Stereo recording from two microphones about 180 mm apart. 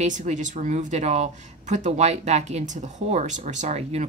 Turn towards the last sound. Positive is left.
turn(degrees=-40)  # may be behind; listen again after turning